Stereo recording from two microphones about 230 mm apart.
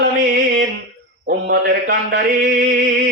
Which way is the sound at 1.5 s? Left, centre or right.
Right.